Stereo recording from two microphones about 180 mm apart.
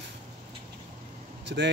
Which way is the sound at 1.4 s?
75° right (ahead or behind).